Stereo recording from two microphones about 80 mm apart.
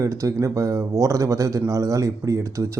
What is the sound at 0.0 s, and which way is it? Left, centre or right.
A man's voice, right.